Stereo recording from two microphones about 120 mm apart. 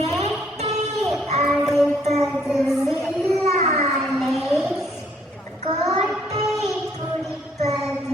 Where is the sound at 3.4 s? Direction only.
60° right (ahead or behind).